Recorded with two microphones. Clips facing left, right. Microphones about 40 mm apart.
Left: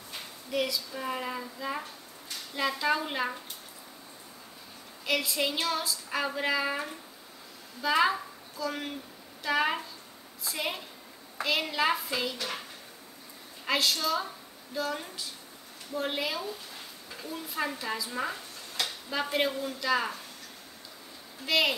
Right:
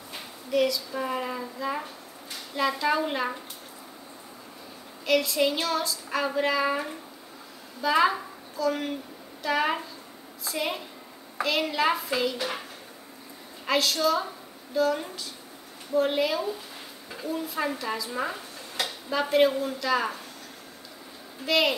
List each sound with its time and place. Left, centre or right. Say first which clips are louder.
0.5 s a woman's voice: right 6 dB; centre
5.0 s a woman's voice: right 6 dB; centre
12.4 s speech: right 4 dB; centre
13.7 s a woman's voice: right 4 dB; centre
21.5 s a woman's voice: right 3 dB; centre